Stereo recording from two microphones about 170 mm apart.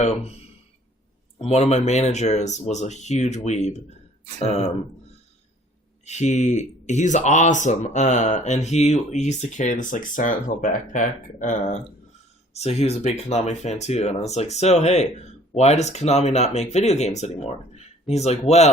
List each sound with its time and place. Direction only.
1.4 s speech: 40° left (ahead or behind)
6.1 s a man's voice: 40° left (ahead or behind)